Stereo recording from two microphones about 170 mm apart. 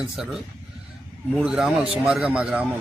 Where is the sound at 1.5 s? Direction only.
Centre (ahead or behind).